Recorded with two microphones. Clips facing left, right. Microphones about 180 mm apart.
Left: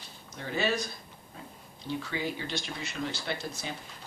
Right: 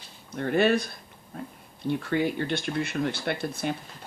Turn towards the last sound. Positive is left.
turn(degrees=-55)  # may be behind; listen again after turning